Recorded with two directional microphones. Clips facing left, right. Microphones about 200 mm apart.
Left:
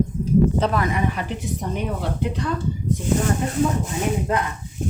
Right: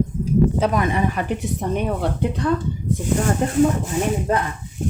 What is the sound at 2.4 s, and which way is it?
Speech, 50° right (ahead or behind).